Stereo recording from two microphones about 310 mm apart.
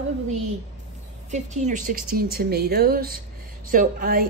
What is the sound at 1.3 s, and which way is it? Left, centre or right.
A woman's voice, right.